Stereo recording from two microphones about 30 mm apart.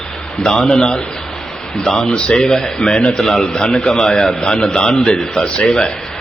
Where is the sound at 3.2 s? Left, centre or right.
Centre.